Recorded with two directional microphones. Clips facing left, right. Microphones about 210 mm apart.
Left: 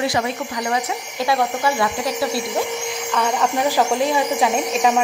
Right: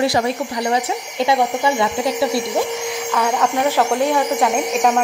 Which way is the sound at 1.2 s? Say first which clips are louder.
Right 2 dB; 20° right (ahead or behind).